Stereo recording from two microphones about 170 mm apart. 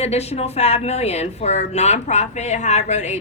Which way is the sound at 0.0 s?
40° left (ahead or behind).